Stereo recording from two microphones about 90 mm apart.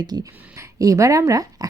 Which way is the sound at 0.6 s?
40° right (ahead or behind).